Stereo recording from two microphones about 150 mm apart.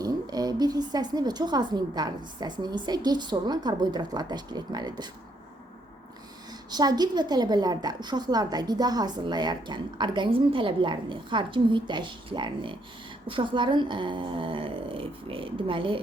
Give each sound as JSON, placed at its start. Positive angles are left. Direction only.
{"t": 0.0, "sound": "a woman's voice", "side_deg": -25}
{"t": 6.7, "sound": "a woman's voice", "side_deg": -25}